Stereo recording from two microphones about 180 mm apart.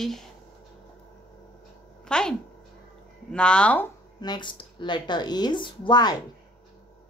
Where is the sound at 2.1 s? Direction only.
5° left (ahead or behind).